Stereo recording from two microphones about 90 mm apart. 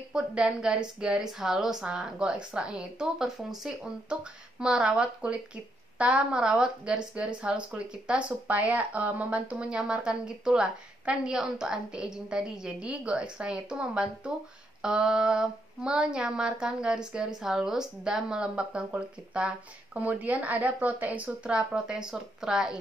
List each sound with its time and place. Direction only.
0.1 s speech: 10° right (ahead or behind)